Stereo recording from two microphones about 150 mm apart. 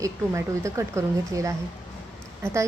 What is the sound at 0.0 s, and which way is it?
A woman's voice, 20° right (ahead or behind).